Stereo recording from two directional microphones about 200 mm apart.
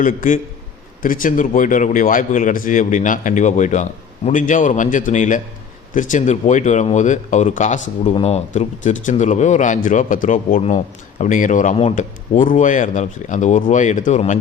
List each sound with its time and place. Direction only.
0.0 s speech: 40° left (ahead or behind)